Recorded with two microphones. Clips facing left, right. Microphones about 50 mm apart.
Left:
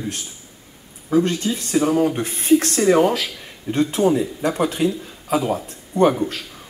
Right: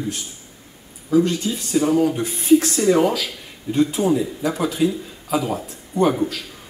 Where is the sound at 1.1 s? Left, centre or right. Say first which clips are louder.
Even; left.